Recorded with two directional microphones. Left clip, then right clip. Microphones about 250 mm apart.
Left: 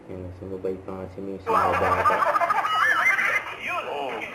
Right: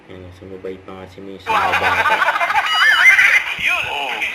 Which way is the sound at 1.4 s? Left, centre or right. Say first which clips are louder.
Right 5 dB; centre.